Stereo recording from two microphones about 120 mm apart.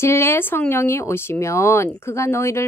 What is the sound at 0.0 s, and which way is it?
Speech, 20° left (ahead or behind).